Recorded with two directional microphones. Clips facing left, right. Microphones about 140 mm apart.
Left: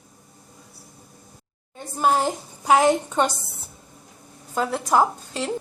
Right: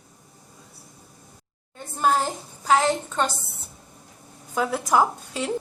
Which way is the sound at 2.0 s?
10° left (ahead or behind).